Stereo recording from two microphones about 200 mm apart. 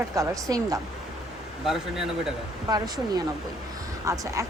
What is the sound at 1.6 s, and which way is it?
Speech, centre (ahead or behind).